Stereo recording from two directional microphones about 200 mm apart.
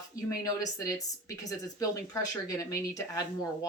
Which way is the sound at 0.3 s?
15° left (ahead or behind).